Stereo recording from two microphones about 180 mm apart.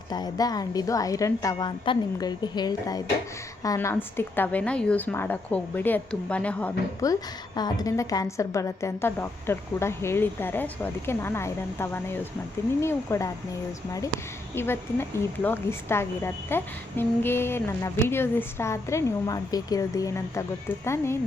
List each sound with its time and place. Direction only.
0.1 s a woman's voice: 20° left (ahead or behind)
7.0 s a woman's voice: 20° left (ahead or behind)
14.5 s a woman's voice: 15° left (ahead or behind)